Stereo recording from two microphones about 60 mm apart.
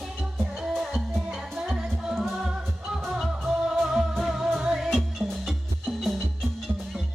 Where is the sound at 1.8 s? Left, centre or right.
Centre.